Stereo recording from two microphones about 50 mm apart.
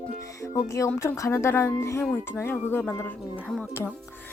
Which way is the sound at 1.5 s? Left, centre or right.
Left.